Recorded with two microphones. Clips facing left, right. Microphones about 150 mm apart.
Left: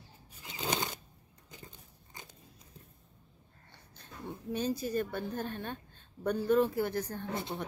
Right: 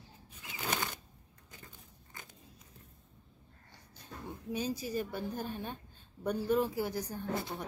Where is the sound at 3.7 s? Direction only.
10° right (ahead or behind).